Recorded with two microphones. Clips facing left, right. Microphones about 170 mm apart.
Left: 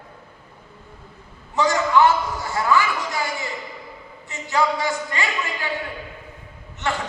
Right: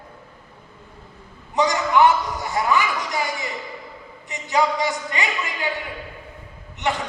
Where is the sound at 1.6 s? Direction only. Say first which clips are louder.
Even; 20° right (ahead or behind).